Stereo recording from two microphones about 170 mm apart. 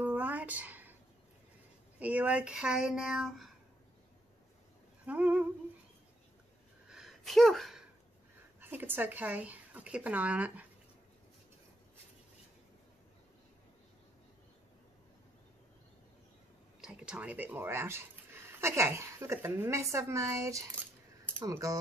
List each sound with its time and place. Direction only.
0.0 s a sound: 10° right (ahead or behind)
2.0 s speech: 10° right (ahead or behind)
5.0 s speech: 10° right (ahead or behind)
6.9 s gasp: centre (ahead or behind)
8.5 s speech: 10° right (ahead or behind)
16.8 s speech: 5° right (ahead or behind)